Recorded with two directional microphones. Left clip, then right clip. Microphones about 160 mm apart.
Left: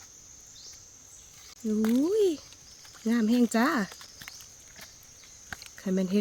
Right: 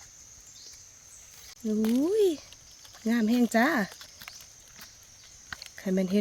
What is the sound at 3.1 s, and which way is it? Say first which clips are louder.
Speech: even; 25° right (ahead or behind).